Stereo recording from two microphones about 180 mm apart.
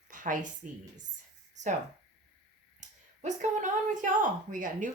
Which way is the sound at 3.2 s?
40° right (ahead or behind).